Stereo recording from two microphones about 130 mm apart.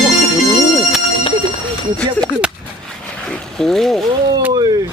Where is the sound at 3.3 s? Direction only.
5° left (ahead or behind).